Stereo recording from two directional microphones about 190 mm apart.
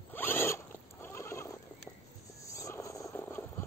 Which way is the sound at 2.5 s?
15° left (ahead or behind).